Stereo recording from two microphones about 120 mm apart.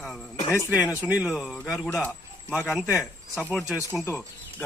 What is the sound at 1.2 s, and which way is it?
Speech, 5° right (ahead or behind).